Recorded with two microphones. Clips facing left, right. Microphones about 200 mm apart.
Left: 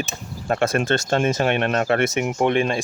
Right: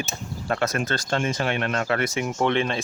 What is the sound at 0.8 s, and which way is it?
Speech, 25° left (ahead or behind).